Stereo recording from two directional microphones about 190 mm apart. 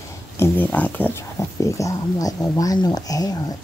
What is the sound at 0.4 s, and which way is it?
Speech, 10° left (ahead or behind).